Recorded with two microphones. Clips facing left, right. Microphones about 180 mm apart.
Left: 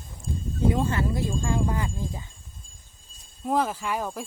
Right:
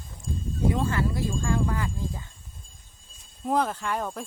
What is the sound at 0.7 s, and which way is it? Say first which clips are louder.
Speech: left 1 dB; 20° left (ahead or behind).